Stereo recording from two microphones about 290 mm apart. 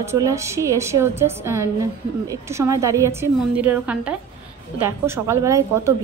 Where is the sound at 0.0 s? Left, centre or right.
Centre.